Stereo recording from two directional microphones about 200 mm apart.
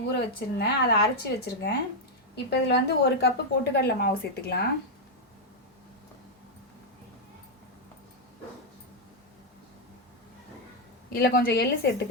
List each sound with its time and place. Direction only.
0.1 s speech: 55° left (ahead or behind)
11.1 s speech: 50° left (ahead or behind)